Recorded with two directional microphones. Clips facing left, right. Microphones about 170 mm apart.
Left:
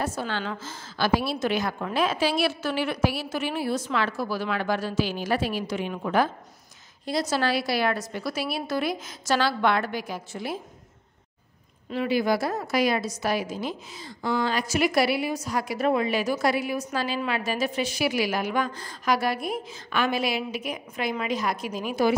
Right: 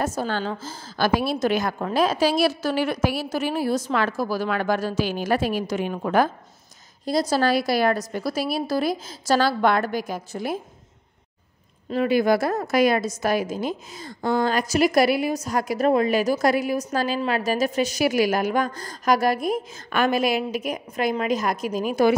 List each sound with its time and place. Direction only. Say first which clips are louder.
0.0 s a woman's voice: right 4 dB; 45° right (ahead or behind)
1.0 s a woman's voice: right 3 dB; 50° right (ahead or behind)
11.9 s a woman's voice: right 4 dB; 50° right (ahead or behind)